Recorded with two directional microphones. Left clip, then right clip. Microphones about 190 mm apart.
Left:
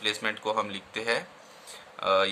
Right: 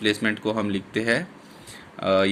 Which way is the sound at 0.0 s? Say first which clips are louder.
Right 5 dB; 10° right (ahead or behind).